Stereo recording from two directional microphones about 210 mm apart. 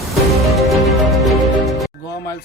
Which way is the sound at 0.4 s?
Centre (ahead or behind).